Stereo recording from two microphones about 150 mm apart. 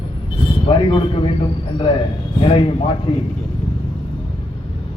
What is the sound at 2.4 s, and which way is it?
Speech, 35° left (ahead or behind).